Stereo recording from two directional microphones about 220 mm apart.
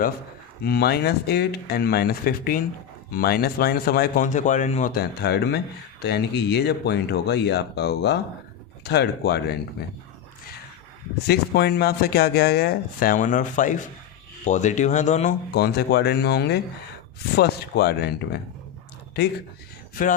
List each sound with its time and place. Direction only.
0.6 s speech: 45° left (ahead or behind)
11.3 s speech: 45° left (ahead or behind)
15.5 s speech: 50° left (ahead or behind)
19.2 s speech: 45° left (ahead or behind)